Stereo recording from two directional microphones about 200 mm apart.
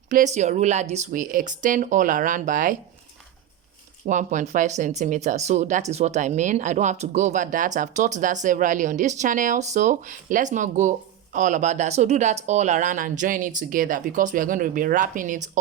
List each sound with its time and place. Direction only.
0.1 s speech: 40° right (ahead or behind)
4.0 s speech: 40° right (ahead or behind)